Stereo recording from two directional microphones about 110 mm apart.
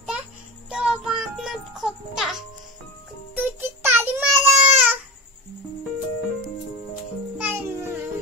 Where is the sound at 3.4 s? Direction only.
20° right (ahead or behind).